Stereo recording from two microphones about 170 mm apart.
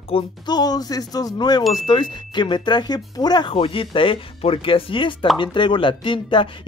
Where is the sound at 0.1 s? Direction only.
25° left (ahead or behind).